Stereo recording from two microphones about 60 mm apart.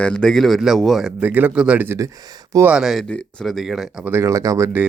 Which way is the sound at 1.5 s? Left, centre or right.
Centre.